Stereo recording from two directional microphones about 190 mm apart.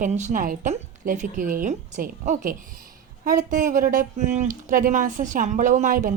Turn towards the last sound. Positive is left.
turn(degrees=-40)  # may be behind; listen again after turning